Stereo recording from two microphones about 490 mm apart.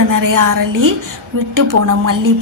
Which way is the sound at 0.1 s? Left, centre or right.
Right.